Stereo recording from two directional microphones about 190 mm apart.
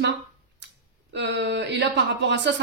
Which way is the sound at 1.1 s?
65° right (ahead or behind).